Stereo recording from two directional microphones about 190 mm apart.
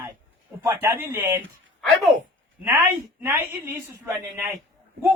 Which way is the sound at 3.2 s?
10° right (ahead or behind).